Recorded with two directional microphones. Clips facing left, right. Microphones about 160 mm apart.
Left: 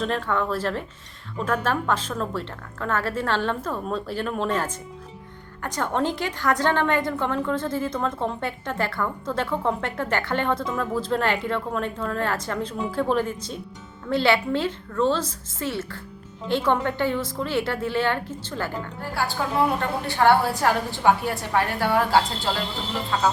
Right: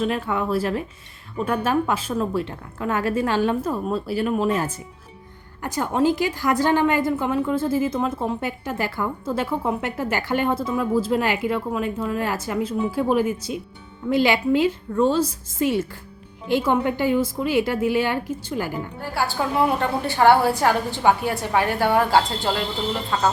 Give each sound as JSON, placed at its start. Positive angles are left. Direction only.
{"t": 0.0, "sound": "a woman's voice", "side_deg": -10}
{"t": 19.2, "sound": "a woman's voice", "side_deg": 0}